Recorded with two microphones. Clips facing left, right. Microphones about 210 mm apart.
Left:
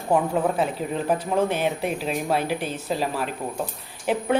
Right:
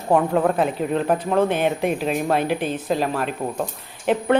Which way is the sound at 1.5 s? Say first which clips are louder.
Right 4 dB; 55° right (ahead or behind).